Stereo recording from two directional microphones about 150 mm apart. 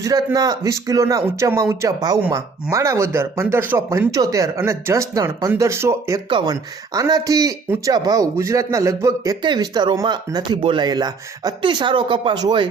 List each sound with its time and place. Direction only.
0.0 s speech: 20° right (ahead or behind)